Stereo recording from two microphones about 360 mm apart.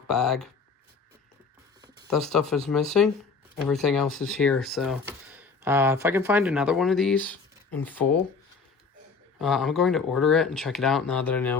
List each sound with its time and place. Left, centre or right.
0.1 s speech: centre
2.0 s speech: centre
9.4 s speech: centre